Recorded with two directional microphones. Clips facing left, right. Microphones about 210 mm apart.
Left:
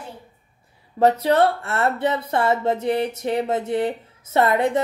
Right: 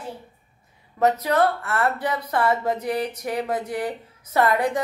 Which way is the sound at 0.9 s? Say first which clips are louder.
Left 3 dB; 30° left (ahead or behind).